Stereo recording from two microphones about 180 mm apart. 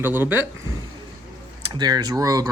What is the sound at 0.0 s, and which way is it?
Speech, 10° right (ahead or behind).